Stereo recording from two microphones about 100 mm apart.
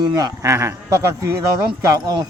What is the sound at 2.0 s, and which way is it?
Speech, 40° right (ahead or behind).